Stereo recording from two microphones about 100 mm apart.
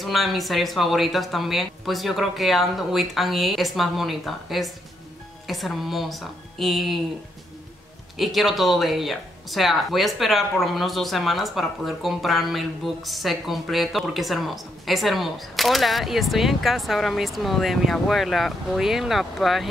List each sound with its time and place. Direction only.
0.0 s speech: centre (ahead or behind)
8.2 s speech: centre (ahead or behind)